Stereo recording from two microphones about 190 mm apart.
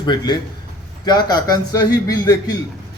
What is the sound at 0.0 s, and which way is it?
Speech, 25° left (ahead or behind).